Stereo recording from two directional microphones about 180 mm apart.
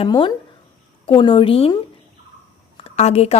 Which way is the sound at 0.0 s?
25° left (ahead or behind).